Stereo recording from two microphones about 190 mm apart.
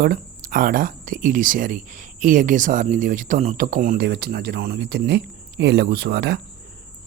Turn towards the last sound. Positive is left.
turn(degrees=-60)  # may be behind; listen again after turning